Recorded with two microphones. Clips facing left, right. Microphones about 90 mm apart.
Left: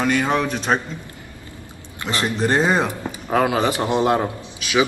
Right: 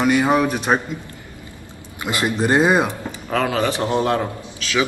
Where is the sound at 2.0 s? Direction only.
15° right (ahead or behind).